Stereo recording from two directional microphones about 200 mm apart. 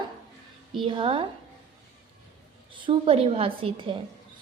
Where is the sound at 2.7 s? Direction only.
25° right (ahead or behind).